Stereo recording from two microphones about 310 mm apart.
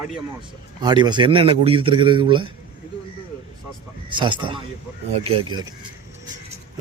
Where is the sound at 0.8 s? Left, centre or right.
Centre.